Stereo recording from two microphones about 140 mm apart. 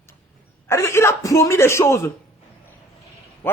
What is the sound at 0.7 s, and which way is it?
Speech, 20° left (ahead or behind).